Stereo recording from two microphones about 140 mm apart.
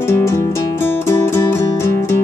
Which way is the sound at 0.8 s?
20° left (ahead or behind).